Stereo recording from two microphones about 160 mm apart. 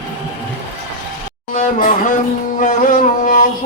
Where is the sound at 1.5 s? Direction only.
55° left (ahead or behind).